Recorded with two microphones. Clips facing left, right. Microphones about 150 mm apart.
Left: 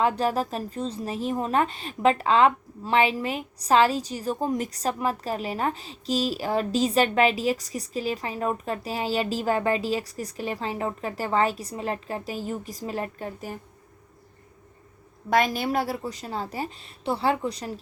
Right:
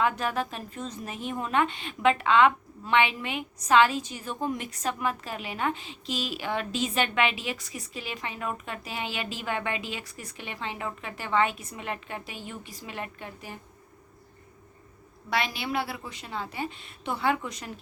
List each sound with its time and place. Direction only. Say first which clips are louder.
0.0 s a woman's voice: left 4 dB; 35° left (ahead or behind)
15.3 s a woman's voice: left 6 dB; 45° left (ahead or behind)